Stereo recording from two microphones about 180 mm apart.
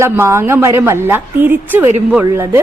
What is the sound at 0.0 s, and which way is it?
A woman's voice, 15° right (ahead or behind).